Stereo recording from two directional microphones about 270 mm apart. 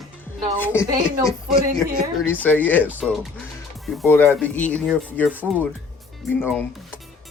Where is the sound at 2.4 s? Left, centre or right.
Centre.